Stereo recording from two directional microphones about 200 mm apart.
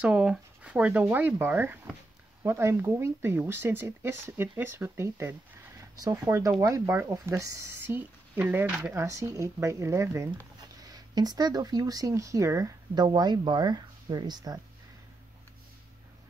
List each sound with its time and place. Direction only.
0.0 s speech: 5° right (ahead or behind)